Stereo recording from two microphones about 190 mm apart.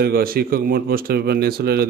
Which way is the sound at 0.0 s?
50° right (ahead or behind).